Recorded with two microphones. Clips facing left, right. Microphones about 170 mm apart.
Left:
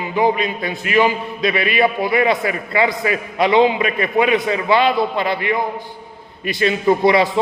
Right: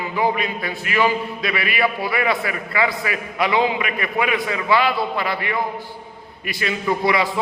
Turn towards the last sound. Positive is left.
turn(degrees=25)  # may be behind; listen again after turning